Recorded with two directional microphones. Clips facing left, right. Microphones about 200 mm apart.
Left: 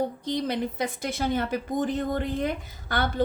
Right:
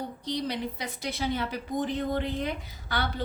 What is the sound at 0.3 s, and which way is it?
A woman's voice, 50° left (ahead or behind).